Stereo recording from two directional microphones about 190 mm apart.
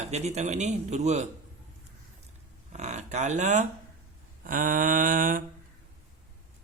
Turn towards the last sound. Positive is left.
turn(degrees=-45)  # may be behind; listen again after turning